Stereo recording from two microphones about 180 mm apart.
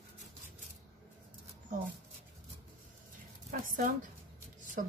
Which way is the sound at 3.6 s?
50° right (ahead or behind).